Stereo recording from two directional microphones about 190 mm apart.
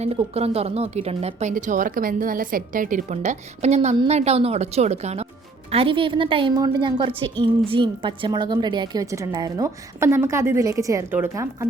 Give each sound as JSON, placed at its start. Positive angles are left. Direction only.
{"t": 0.0, "sound": "a woman's voice", "side_deg": -30}